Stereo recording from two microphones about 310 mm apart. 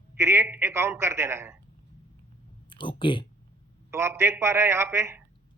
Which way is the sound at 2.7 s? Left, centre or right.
Centre.